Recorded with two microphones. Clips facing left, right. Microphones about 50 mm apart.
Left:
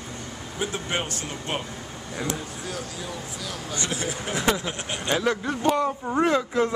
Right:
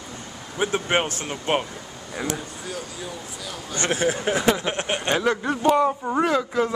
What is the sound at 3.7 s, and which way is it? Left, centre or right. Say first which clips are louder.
Speech: right 8 dB; right.